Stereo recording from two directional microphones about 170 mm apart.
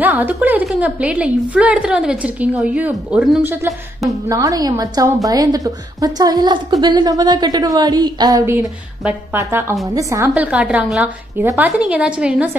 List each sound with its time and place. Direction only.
0.0 s a woman's voice: 10° right (ahead or behind)
4.3 s a woman's voice: 20° right (ahead or behind)